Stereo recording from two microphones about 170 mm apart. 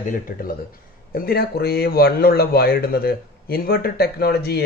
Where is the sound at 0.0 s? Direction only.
55° left (ahead or behind).